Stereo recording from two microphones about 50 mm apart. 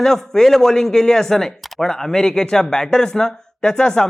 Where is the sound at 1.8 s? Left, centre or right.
Centre.